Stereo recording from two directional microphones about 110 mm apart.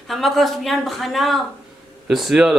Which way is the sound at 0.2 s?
Centre (ahead or behind).